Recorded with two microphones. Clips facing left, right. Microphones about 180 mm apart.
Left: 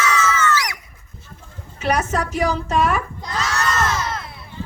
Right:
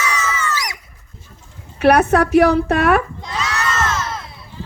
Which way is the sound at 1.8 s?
60° right (ahead or behind).